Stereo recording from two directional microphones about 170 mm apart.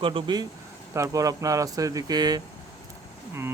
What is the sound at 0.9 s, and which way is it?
Speech, 20° right (ahead or behind).